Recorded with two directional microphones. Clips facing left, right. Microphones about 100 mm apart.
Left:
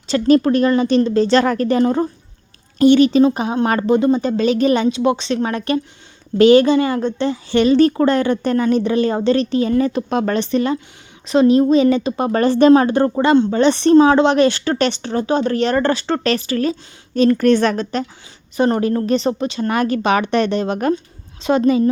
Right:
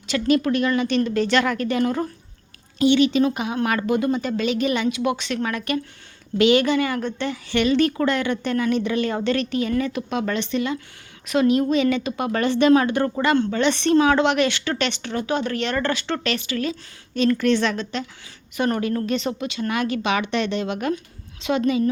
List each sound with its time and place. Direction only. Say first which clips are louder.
0.1 s speech: left 6 dB; 35° left (ahead or behind)
2.7 s a woman's voice: left 6 dB; 45° left (ahead or behind)
18.5 s speech: left 6 dB; 30° left (ahead or behind)